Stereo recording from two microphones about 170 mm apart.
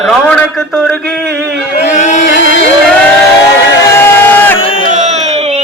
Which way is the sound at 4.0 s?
10° left (ahead or behind).